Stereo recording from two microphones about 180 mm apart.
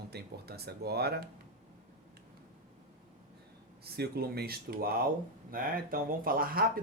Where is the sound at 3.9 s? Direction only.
60° right (ahead or behind).